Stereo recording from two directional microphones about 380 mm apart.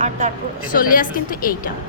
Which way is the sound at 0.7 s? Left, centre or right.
Left.